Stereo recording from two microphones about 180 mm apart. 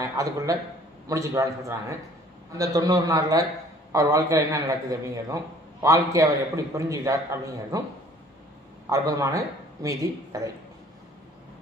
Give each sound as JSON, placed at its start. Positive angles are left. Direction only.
{"t": 0.0, "sound": "a man's voice", "side_deg": -20}
{"t": 8.8, "sound": "a man's voice", "side_deg": -20}